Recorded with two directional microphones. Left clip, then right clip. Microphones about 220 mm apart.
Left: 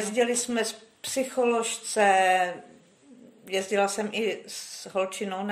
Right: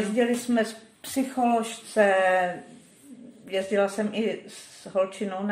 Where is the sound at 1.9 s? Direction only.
45° left (ahead or behind).